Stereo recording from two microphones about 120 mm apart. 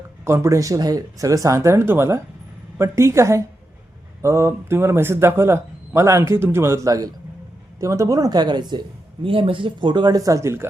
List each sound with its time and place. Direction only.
0.3 s speech: 25° right (ahead or behind)
9.2 s speech: 50° right (ahead or behind); by 10.7 s 20° right (ahead or behind)